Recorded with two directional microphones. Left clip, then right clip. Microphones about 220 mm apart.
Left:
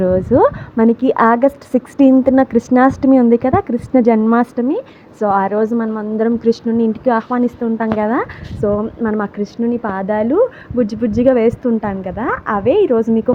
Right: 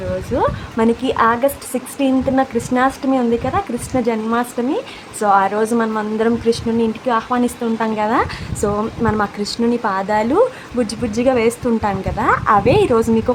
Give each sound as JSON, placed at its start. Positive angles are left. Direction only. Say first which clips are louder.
{"t": 0.3, "sound": "a woman's voice", "louder": "left 6 dB", "side_deg": 20}